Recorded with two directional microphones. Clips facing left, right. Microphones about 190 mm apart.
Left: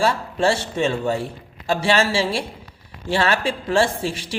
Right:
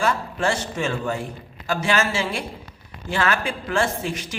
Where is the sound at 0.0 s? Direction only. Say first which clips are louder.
Left 3 dB; 30° left (ahead or behind).